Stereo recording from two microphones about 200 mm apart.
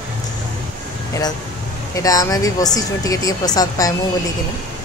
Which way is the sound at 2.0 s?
15° left (ahead or behind).